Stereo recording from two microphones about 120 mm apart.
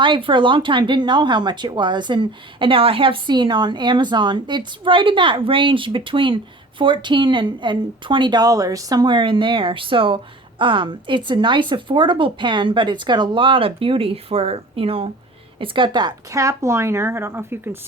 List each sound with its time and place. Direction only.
0.0 s a woman's voice: 45° right (ahead or behind); by 17.7 s 20° right (ahead or behind)